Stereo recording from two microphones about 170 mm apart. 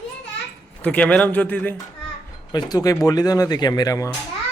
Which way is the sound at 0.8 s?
5° left (ahead or behind).